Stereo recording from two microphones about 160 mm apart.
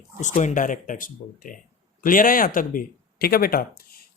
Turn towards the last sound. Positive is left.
turn(degrees=65)  # may be behind; listen again after turning